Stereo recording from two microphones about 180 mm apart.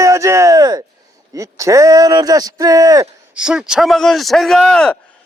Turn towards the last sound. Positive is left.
turn(degrees=5)  # may be behind; listen again after turning